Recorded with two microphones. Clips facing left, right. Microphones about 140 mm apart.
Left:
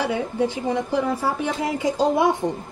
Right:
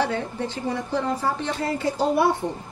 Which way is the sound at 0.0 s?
10° left (ahead or behind).